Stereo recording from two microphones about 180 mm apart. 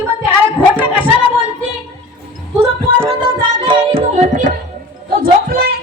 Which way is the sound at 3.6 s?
25° right (ahead or behind).